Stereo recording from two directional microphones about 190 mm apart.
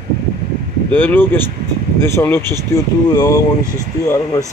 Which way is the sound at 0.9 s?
10° left (ahead or behind).